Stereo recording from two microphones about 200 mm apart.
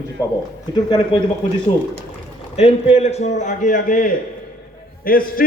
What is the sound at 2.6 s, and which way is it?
A man's voice, 30° left (ahead or behind).